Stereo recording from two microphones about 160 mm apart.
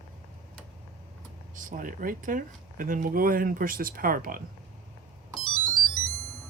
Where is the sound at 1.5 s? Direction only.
55° right (ahead or behind).